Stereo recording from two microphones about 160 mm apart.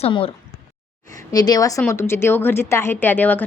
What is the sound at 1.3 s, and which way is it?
A woman's voice, 25° left (ahead or behind).